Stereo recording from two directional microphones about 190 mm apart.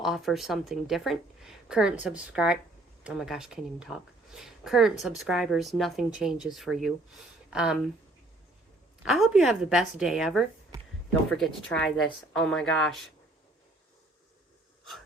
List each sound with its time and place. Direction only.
0.0 s speech: centre (ahead or behind)
9.0 s speech: centre (ahead or behind)
10.7 s a sound: 15° right (ahead or behind)
11.3 s speech: 5° left (ahead or behind)